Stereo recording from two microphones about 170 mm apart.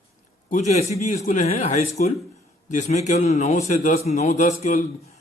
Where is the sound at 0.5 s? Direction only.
40° left (ahead or behind).